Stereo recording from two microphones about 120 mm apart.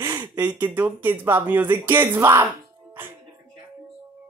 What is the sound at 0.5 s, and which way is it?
Speech, 15° right (ahead or behind).